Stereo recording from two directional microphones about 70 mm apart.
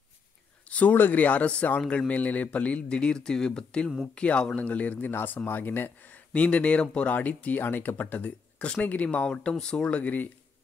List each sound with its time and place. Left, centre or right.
0.7 s speech: left